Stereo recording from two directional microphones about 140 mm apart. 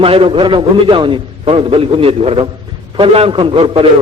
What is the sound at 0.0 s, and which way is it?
A man's voice, 40° right (ahead or behind).